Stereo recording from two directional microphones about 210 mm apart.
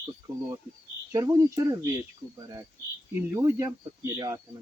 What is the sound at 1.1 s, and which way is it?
Speech, 15° right (ahead or behind).